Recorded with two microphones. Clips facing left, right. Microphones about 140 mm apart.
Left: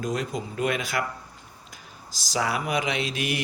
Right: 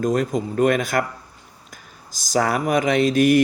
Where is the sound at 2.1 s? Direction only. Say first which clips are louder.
Right 7 dB; 50° right (ahead or behind).